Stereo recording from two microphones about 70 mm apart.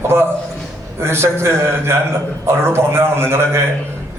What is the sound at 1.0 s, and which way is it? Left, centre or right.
A man's voice, right.